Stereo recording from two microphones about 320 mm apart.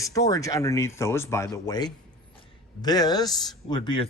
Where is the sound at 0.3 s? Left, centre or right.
Centre.